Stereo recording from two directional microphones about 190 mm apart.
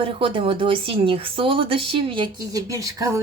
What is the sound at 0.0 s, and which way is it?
Speech, 25° right (ahead or behind).